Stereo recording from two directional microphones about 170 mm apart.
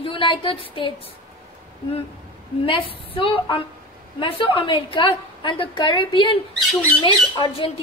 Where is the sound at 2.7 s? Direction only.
30° left (ahead or behind).